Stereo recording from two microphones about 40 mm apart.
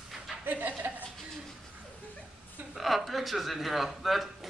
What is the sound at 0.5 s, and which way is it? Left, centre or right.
Speech, right.